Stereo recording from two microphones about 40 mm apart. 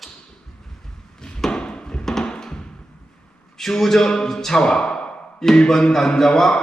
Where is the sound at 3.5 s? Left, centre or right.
Centre.